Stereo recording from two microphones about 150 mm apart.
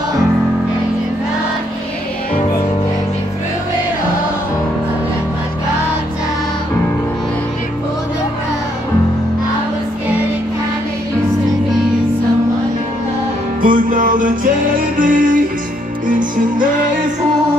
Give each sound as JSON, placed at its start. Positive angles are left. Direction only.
{"t": 13.6, "sound": "music", "side_deg": -65}